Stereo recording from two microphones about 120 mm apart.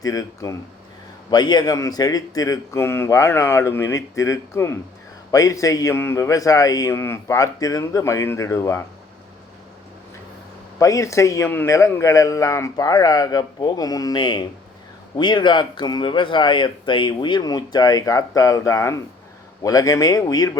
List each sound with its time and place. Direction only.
0.0 s a man's voice: 30° left (ahead or behind)
10.8 s a man's voice: 25° left (ahead or behind)